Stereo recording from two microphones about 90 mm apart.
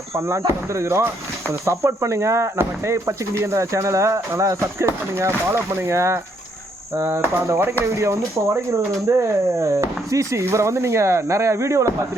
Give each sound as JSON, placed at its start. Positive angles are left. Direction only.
{"t": 0.1, "sound": "speech", "side_deg": -30}